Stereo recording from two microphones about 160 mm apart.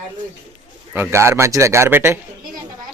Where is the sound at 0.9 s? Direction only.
15° right (ahead or behind).